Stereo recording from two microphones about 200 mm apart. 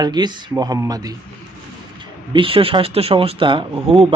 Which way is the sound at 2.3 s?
25° right (ahead or behind).